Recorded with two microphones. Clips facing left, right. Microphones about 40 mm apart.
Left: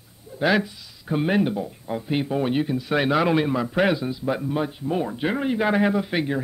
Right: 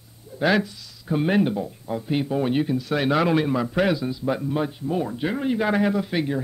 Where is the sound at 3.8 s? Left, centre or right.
Centre.